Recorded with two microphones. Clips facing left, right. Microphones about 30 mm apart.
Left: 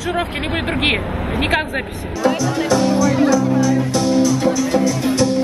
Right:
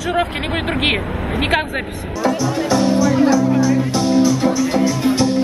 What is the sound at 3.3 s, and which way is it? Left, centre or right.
Speech, centre.